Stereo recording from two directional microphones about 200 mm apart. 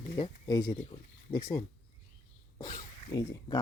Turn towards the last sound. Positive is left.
turn(degrees=20)  # may be behind; listen again after turning